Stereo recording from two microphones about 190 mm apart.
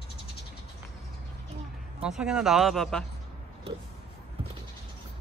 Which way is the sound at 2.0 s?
5° right (ahead or behind).